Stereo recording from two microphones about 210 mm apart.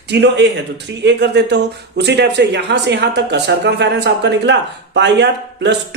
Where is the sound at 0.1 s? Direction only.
55° right (ahead or behind).